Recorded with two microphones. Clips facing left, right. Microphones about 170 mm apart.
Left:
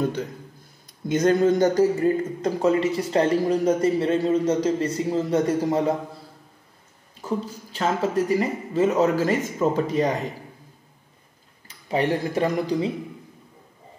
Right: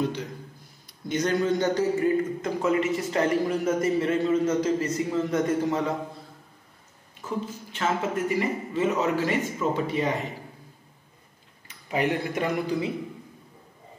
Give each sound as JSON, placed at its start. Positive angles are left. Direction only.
{"t": 1.1, "sound": "a man's voice", "side_deg": 45}
{"t": 7.2, "sound": "a man's voice", "side_deg": 35}
{"t": 11.6, "sound": "speech", "side_deg": 30}